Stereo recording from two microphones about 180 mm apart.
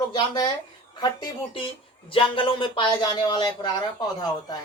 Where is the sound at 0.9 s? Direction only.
25° left (ahead or behind).